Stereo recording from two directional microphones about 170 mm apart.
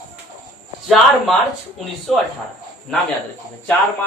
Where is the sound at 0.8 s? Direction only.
Centre (ahead or behind).